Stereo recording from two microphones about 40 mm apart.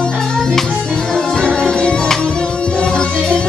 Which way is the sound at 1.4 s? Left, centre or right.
Left.